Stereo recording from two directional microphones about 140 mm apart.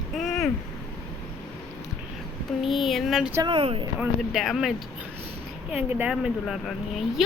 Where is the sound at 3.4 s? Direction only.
40° right (ahead or behind).